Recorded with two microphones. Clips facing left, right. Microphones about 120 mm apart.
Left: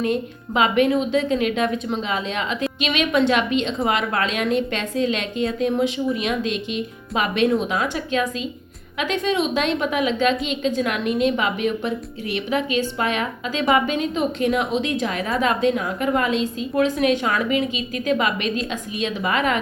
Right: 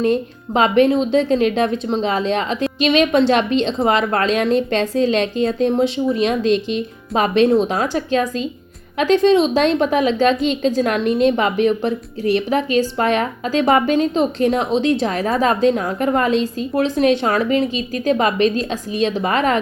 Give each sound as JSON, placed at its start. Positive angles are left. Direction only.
{"t": 0.0, "sound": "a woman's voice", "side_deg": -35}